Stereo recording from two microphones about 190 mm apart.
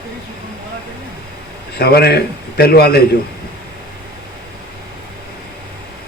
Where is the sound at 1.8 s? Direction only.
55° left (ahead or behind).